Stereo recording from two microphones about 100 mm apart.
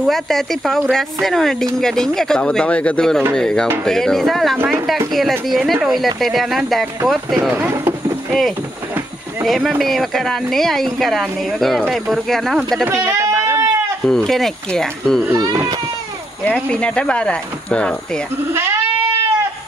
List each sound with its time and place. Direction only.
0.0 s speech: centre (ahead or behind)
4.6 s speech: 20° right (ahead or behind)
5.5 s speech: centre (ahead or behind)
7.5 s speech: 20° right (ahead or behind)
8.3 s speech: 5° left (ahead or behind)
12.8 s a sound: 30° right (ahead or behind)
14.0 s speech: 5° left (ahead or behind)
15.3 s speech: 40° right (ahead or behind)
16.4 s speech: 10° left (ahead or behind)
18.5 s goat: 25° right (ahead or behind)